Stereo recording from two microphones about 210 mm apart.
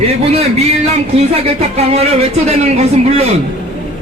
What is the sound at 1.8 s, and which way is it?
A man's voice, 30° right (ahead or behind).